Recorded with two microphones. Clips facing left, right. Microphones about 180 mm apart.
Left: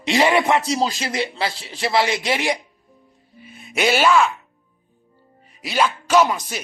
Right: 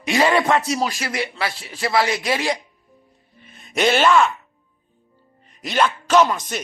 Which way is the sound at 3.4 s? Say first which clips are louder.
Right 1 dB; 5° left (ahead or behind).